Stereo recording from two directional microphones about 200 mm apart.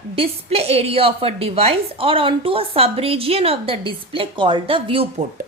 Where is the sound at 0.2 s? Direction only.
30° right (ahead or behind).